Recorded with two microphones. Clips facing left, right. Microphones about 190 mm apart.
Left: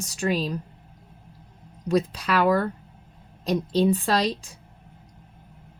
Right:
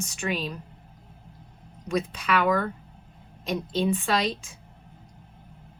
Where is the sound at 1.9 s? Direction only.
35° left (ahead or behind).